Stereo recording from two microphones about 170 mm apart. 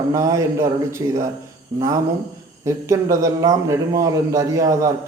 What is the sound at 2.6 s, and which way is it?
A man's voice, 15° right (ahead or behind).